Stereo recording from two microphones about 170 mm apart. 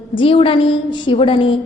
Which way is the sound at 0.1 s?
30° left (ahead or behind).